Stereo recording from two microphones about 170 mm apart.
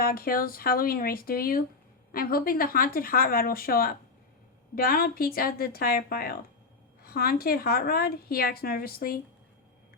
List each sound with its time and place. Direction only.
0.0 s a woman's voice: 60° left (ahead or behind)